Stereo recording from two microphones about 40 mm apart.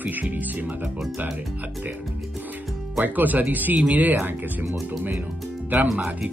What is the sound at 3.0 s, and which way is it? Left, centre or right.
Speech, right.